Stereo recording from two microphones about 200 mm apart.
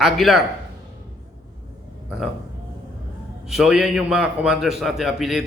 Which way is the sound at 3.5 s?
5° right (ahead or behind).